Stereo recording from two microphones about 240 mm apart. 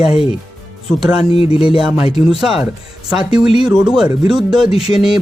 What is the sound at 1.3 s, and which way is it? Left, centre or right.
Speech, left.